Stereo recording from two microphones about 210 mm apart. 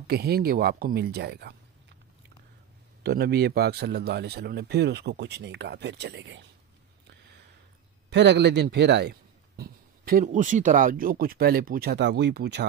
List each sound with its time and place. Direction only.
0.0 s a man's voice: 50° right (ahead or behind)
3.0 s a man's voice: 50° right (ahead or behind)
8.1 s speech: 55° right (ahead or behind)
9.6 s a man's voice: 45° right (ahead or behind)